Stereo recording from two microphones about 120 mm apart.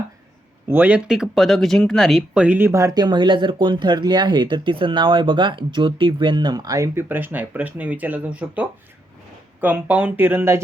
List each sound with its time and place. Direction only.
0.7 s speech: 15° right (ahead or behind)